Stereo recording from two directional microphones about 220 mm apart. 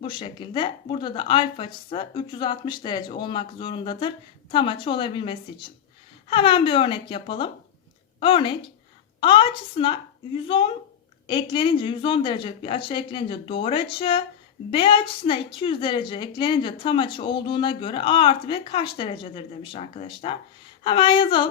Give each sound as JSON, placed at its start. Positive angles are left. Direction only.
{"t": 0.0, "sound": "a woman's voice", "side_deg": 20}